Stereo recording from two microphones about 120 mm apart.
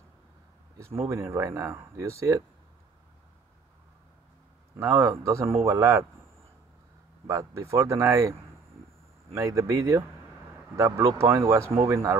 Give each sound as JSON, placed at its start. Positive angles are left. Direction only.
{"t": 0.7, "sound": "speech", "side_deg": -25}
{"t": 4.7, "sound": "speech", "side_deg": -25}
{"t": 7.2, "sound": "speech", "side_deg": -25}